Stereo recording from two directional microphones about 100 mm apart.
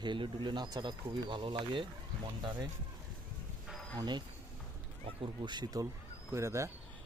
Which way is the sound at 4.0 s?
45° right (ahead or behind).